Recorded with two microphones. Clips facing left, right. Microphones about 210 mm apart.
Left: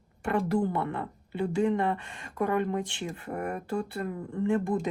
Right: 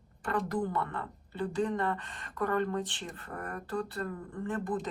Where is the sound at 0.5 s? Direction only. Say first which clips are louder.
Left 7 dB; 25° left (ahead or behind).